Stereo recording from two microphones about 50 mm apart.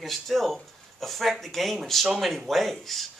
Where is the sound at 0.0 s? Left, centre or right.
Centre.